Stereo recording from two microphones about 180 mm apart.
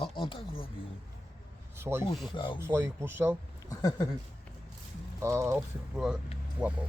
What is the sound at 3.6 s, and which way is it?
Speech, 20° left (ahead or behind).